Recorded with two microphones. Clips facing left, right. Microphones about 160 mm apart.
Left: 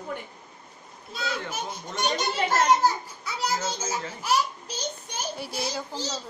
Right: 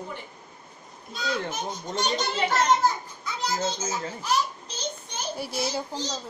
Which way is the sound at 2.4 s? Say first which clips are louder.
Left 1 dB; 10° left (ahead or behind).